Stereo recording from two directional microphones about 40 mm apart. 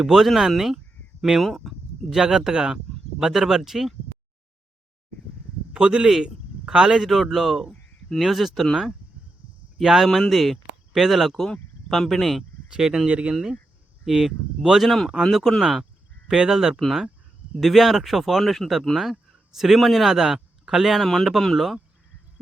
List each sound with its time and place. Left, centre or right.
0.0 s a man's voice: centre
5.7 s a man's voice: centre
10.1 s speech: centre
12.7 s a man's voice: centre
13.1 s speech: right
13.3 s a man's voice: centre
14.8 s speech: centre
16.3 s a man's voice: centre
17.6 s speech: centre
20.1 s speech: centre